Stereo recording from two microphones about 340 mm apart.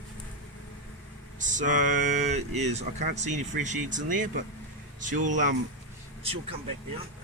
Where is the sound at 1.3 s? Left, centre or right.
Right.